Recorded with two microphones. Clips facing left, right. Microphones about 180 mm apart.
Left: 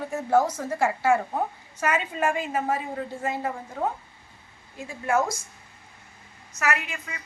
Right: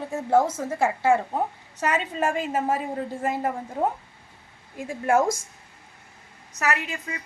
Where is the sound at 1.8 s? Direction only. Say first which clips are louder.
Even; 35° right (ahead or behind).